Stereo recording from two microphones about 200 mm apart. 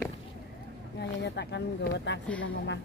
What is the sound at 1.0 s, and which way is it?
Speech, 60° left (ahead or behind).